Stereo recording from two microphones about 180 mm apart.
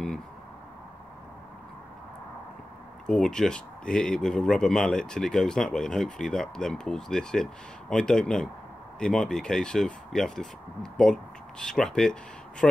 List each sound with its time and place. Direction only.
3.1 s speech: 5° left (ahead or behind)